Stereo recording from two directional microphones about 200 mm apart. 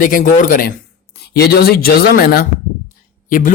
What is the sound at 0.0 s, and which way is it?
Speech, 40° left (ahead or behind).